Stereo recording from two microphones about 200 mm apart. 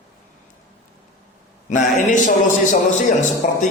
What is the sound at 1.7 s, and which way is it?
Mantra, 40° left (ahead or behind).